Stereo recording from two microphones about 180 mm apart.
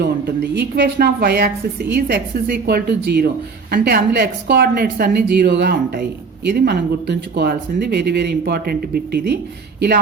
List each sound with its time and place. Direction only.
0.0 s speech: 65° right (ahead or behind)